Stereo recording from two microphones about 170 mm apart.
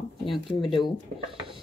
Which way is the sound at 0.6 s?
30° left (ahead or behind).